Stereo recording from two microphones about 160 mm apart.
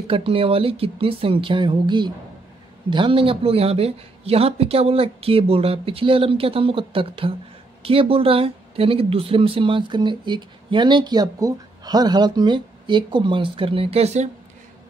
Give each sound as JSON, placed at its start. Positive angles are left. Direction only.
{"t": 0.0, "sound": "speech", "side_deg": -35}